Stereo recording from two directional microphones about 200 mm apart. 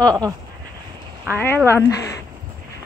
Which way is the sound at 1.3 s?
10° left (ahead or behind).